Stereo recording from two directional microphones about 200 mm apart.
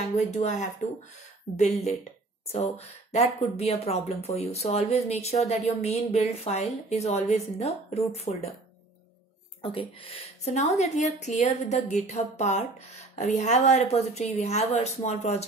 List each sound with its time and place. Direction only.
0.3 s speech: 35° left (ahead or behind)
2.5 s speech: 30° left (ahead or behind)
9.6 s speech: 30° left (ahead or behind)